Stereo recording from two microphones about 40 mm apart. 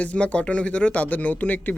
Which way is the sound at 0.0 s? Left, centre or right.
Left.